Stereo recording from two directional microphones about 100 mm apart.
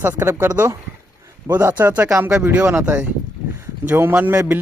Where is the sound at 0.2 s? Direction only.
25° right (ahead or behind).